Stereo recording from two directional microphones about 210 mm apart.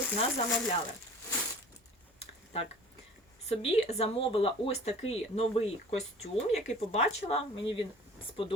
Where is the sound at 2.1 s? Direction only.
30° left (ahead or behind).